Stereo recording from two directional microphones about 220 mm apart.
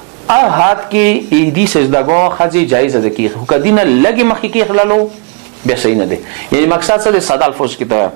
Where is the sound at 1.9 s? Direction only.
25° right (ahead or behind).